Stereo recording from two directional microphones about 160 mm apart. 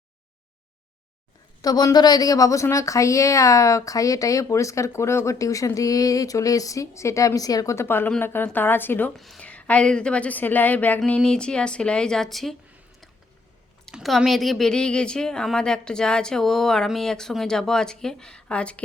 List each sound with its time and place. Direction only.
1.6 s a woman's voice: 25° left (ahead or behind)
9.1 s a woman's voice: centre (ahead or behind)
13.8 s a woman's voice: centre (ahead or behind)